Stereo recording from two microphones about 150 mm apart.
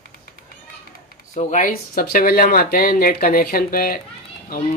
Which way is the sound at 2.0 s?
75° left (ahead or behind).